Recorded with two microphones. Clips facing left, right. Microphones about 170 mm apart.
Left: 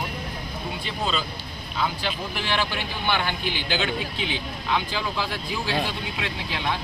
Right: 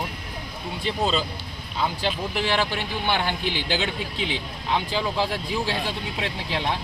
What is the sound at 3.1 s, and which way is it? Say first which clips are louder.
Speech: right 1 dB; 30° right (ahead or behind).